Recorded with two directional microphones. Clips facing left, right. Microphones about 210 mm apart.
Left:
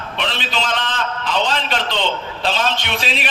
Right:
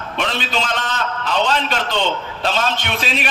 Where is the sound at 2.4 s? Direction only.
45° right (ahead or behind).